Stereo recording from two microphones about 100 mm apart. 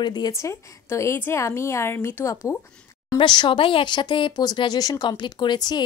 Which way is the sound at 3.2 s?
50° left (ahead or behind).